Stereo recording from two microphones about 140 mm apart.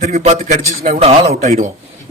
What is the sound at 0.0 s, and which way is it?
A man's voice, 55° right (ahead or behind).